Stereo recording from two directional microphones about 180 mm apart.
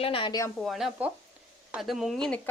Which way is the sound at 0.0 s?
30° left (ahead or behind).